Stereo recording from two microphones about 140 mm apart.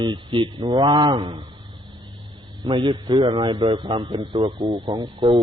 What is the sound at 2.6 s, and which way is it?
A man's voice, 35° right (ahead or behind).